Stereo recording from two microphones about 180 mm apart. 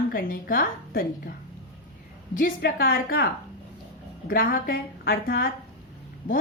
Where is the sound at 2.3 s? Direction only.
55° left (ahead or behind).